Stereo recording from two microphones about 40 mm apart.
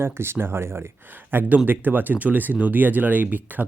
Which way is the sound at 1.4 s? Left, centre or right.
Right.